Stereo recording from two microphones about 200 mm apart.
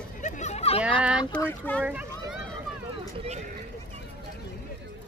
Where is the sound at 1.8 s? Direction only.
5° right (ahead or behind).